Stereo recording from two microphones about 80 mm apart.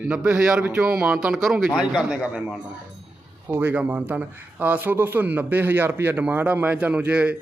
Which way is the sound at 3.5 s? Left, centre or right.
Right.